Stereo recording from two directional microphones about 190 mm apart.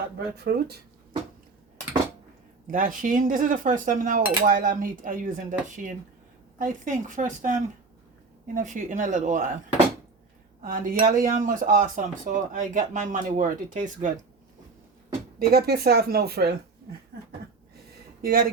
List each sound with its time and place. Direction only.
0.3 s speech: 55° right (ahead or behind)
2.6 s speech: 45° right (ahead or behind)
8.5 s speech: 40° right (ahead or behind)
10.6 s speech: 50° right (ahead or behind)
15.4 s speech: 55° right (ahead or behind)
18.2 s speech: 50° right (ahead or behind)